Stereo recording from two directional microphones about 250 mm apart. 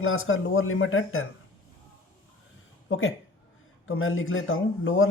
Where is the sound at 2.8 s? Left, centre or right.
Left.